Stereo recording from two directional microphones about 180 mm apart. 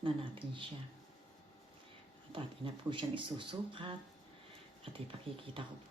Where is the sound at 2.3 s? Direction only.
30° right (ahead or behind).